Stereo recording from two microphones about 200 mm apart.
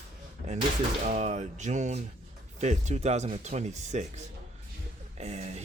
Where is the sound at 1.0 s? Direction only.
35° right (ahead or behind).